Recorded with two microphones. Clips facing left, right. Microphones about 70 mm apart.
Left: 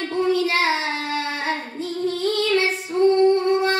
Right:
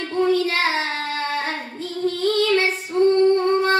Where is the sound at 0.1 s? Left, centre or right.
Right.